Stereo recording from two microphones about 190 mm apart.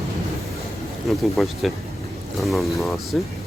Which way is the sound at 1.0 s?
Centre (ahead or behind).